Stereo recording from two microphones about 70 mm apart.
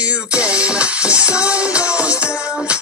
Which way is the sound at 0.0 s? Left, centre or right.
Centre.